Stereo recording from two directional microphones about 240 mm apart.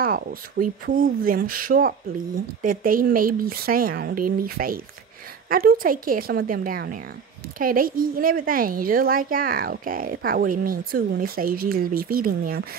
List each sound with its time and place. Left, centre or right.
0.0 s a woman's voice: right